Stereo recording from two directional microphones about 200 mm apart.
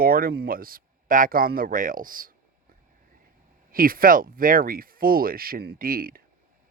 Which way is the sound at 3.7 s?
45° right (ahead or behind).